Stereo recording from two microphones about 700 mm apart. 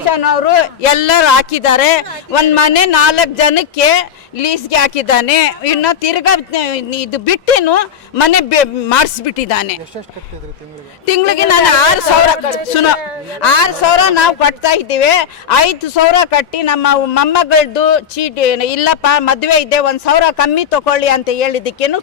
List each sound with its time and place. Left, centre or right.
0.1 s a man's voice: left
11.0 s a woman's voice: left
13.4 s a man's voice: left